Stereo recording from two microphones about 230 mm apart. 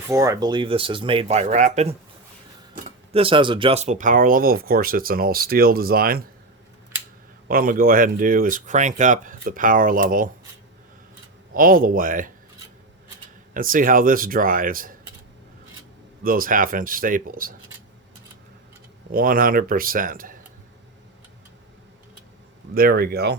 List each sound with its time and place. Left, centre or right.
0.1 s speech: centre; by 2.0 s right
3.1 s speech: right
7.4 s speech: right
11.5 s speech: right
13.5 s speech: right
16.2 s speech: right
19.1 s speech: right
22.7 s speech: right